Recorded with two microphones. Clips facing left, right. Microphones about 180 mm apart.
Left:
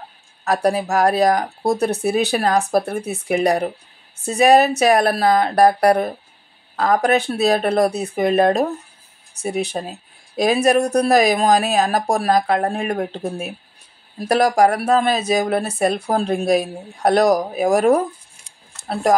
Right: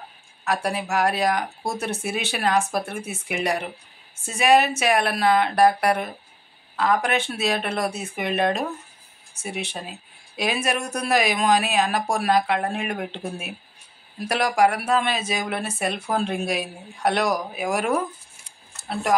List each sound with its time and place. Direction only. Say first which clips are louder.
0.5 s speech: left 7 dB; 35° left (ahead or behind)